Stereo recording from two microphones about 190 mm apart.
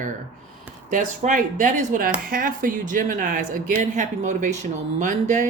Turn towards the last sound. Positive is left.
turn(degrees=-40)  # may be behind; listen again after turning